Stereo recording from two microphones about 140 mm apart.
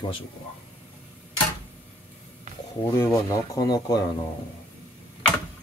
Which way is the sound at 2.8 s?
20° left (ahead or behind).